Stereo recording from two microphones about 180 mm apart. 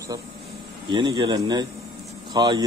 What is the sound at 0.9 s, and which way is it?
Speech, 25° right (ahead or behind).